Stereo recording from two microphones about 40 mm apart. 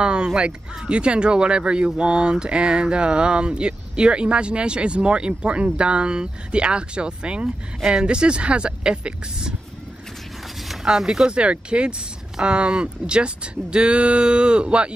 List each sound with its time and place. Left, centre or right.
0.0 s speech: right
10.7 s speech: centre
11.2 s speech: right